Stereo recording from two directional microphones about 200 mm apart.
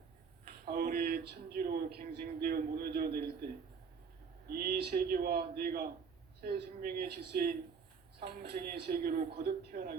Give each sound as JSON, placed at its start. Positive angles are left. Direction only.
{"t": 0.4, "sound": "speech", "side_deg": -45}
{"t": 4.4, "sound": "a man's voice", "side_deg": -45}